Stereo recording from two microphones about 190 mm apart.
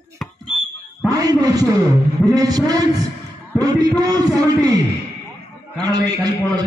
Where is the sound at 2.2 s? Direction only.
20° right (ahead or behind).